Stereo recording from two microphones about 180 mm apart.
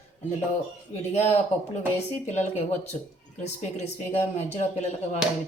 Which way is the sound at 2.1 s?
40° left (ahead or behind).